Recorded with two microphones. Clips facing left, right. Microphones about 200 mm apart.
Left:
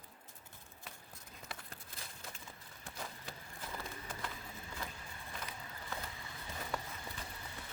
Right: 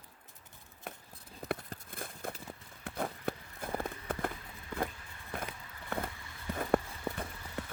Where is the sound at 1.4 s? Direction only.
35° right (ahead or behind).